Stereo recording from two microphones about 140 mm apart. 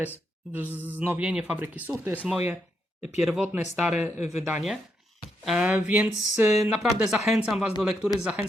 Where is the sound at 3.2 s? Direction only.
Centre (ahead or behind).